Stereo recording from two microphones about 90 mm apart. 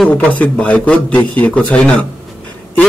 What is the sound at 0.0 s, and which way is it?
A man's voice, 15° left (ahead or behind).